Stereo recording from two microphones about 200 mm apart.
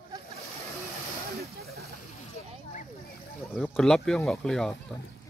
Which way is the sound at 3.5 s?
5° left (ahead or behind).